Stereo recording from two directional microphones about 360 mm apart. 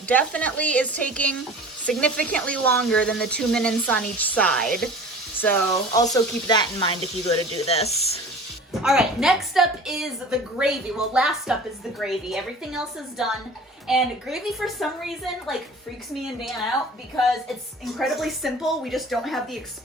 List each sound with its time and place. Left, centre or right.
0.1 s speech: centre
8.8 s speech: centre
17.9 s speech: centre